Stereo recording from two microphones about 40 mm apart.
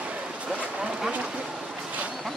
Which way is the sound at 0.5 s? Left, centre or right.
Right.